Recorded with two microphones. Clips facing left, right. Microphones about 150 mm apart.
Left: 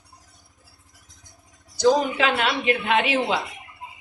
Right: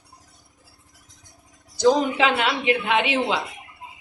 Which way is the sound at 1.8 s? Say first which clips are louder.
Right 1 dB; 20° right (ahead or behind).